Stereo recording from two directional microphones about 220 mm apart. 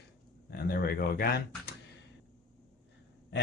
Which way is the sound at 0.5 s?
45° left (ahead or behind).